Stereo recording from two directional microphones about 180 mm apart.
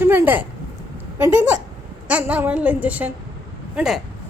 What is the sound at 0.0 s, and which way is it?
A woman's voice, 10° right (ahead or behind).